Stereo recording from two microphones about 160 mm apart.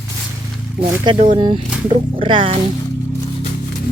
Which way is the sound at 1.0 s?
30° right (ahead or behind).